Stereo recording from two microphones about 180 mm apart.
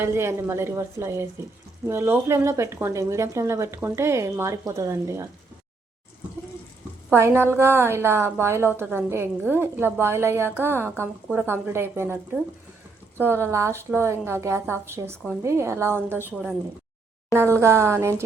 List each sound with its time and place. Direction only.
0.0 s a woman's voice: 15° right (ahead or behind)
7.1 s a woman's voice: 15° right (ahead or behind)